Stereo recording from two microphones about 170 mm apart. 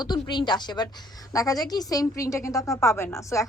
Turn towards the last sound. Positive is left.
turn(degrees=20)  # may be behind; listen again after turning